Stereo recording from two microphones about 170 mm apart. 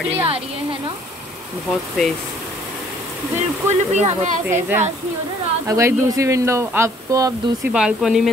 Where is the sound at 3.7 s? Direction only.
40° right (ahead or behind).